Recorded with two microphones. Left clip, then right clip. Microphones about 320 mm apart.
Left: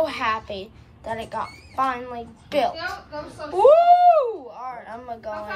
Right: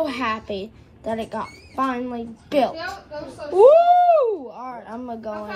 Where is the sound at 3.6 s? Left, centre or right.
Centre.